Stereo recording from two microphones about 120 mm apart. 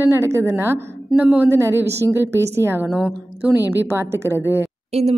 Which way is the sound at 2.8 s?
5° right (ahead or behind).